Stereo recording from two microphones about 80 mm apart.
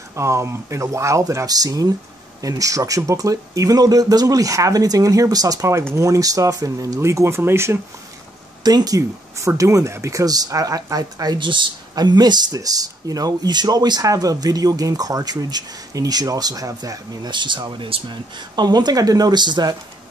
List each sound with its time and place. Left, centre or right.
0.1 s speech: right
8.6 s speech: right
11.3 s speech: right
11.9 s speech: right
17.3 s speech: right